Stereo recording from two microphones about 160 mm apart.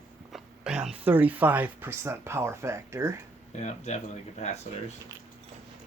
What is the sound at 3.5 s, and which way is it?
Speech, 50° left (ahead or behind).